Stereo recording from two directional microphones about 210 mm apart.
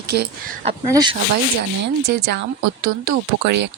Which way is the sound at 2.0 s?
50° right (ahead or behind).